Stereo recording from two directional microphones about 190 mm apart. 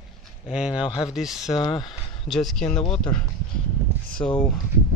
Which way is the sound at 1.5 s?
25° left (ahead or behind).